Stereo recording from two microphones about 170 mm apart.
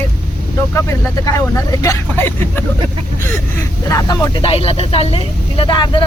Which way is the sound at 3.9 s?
20° left (ahead or behind).